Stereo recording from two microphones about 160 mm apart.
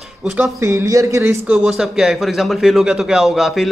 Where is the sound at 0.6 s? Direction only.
15° right (ahead or behind).